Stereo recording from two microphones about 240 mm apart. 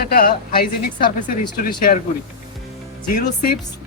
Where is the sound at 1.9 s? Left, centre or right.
Left.